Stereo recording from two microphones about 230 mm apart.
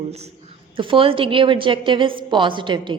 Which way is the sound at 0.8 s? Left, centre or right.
Right.